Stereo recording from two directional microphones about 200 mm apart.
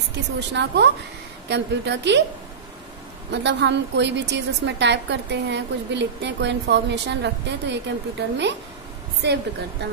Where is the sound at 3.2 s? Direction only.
60° right (ahead or behind).